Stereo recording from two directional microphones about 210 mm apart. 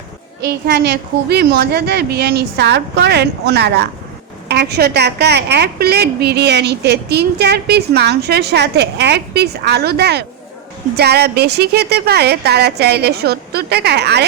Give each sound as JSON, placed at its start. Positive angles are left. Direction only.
{"t": 0.4, "sound": "a woman's voice", "side_deg": -55}